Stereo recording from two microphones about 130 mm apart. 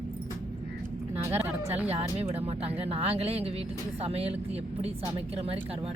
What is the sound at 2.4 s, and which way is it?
Speech, 50° right (ahead or behind).